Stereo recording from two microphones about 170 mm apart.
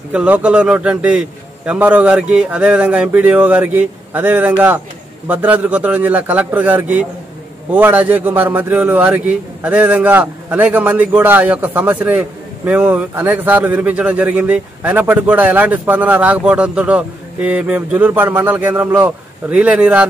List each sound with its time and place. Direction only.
0.1 s a man's voice: 5° right (ahead or behind)